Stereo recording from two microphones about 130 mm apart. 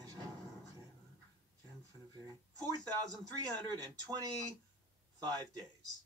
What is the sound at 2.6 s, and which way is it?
Speech, 30° right (ahead or behind).